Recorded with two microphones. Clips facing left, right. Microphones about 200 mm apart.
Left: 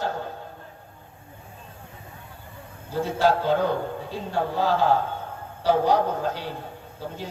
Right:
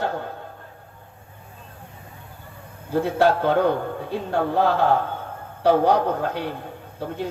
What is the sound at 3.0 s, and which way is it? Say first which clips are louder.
A man's voice: right 2 dB; 60° right (ahead or behind).